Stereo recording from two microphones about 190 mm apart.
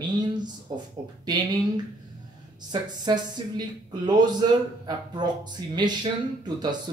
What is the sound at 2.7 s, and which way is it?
Speech, 25° right (ahead or behind).